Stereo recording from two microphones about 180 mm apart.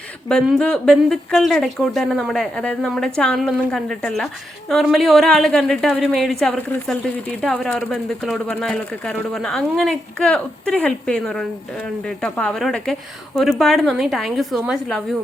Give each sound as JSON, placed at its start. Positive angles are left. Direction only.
{"t": 0.3, "sound": "speech", "side_deg": 5}